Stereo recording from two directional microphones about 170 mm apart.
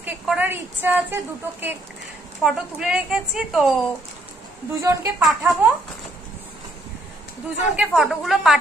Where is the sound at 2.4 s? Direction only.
5° right (ahead or behind).